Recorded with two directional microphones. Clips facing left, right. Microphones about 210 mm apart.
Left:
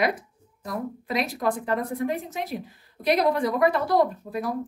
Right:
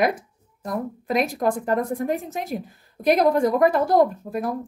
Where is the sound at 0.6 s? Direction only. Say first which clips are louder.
Right 3 dB; 50° right (ahead or behind).